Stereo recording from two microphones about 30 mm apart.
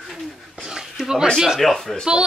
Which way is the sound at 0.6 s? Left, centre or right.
Centre.